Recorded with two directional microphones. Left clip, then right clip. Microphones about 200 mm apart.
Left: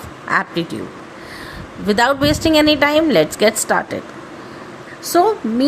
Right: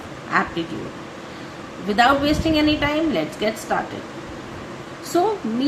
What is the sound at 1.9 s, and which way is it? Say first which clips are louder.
A woman's voice: left 2 dB; 55° left (ahead or behind).